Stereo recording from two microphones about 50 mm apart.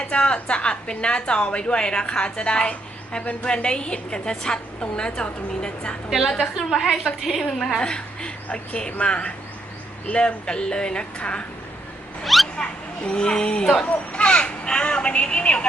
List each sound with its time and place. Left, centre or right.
0.1 s a woman's voice: left
6.1 s a woman's voice: centre
6.7 s a woman's voice: centre
7.8 s a woman's voice: centre
12.2 s speech: centre
12.5 s speech: centre